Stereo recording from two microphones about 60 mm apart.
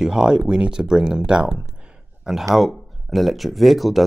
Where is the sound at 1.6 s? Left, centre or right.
Centre.